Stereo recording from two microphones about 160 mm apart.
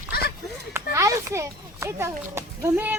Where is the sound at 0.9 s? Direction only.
20° right (ahead or behind).